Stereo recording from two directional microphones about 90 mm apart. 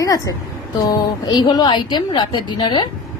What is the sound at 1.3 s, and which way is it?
A woman's voice, 50° left (ahead or behind).